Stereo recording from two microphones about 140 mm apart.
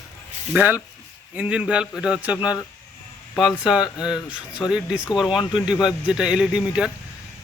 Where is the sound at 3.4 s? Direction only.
Centre (ahead or behind).